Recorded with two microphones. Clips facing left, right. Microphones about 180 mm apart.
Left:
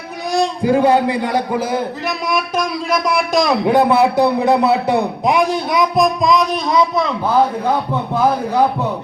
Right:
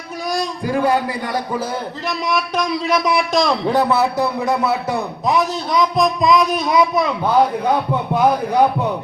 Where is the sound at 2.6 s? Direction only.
Centre (ahead or behind).